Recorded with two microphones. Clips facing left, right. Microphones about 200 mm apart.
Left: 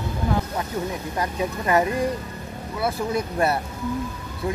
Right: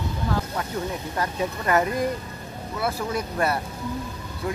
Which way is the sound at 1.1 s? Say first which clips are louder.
Left 1 dB; 15° left (ahead or behind).